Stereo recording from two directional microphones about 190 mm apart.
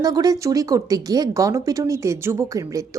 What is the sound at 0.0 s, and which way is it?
A woman's voice, 20° right (ahead or behind).